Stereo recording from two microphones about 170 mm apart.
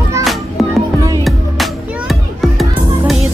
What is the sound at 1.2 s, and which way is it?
Music, centre (ahead or behind).